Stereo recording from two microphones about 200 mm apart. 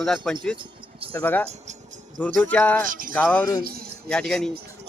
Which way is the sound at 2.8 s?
45° right (ahead or behind).